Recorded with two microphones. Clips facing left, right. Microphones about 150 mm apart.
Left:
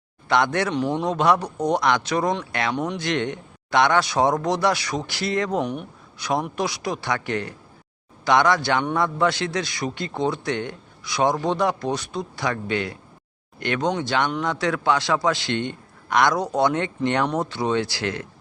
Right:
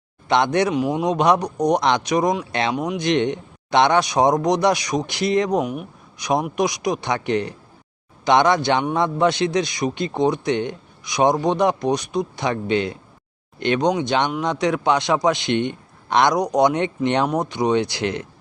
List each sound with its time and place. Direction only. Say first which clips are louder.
0.3 s speech: right 3 dB; 20° right (ahead or behind)
3.0 s a man's voice: right 5 dB; 20° right (ahead or behind)